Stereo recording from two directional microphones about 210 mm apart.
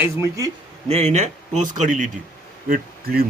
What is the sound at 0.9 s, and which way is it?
A man's voice, 30° right (ahead or behind).